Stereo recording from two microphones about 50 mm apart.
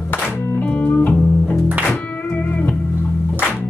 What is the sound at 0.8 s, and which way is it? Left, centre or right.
Music, left.